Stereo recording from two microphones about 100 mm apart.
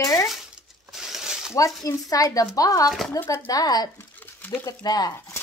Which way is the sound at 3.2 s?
40° left (ahead or behind).